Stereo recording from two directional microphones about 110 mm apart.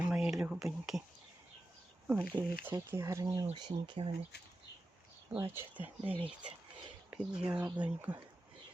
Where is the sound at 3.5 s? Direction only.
45° right (ahead or behind).